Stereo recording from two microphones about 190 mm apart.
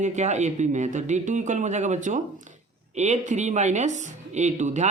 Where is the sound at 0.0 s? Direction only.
40° right (ahead or behind).